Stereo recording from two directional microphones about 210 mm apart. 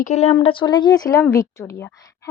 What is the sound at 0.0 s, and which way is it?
A woman's voice, 30° left (ahead or behind).